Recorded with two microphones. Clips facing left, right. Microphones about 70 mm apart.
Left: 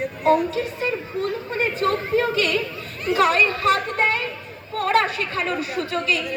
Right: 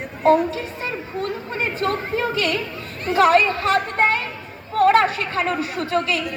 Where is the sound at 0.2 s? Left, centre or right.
Right.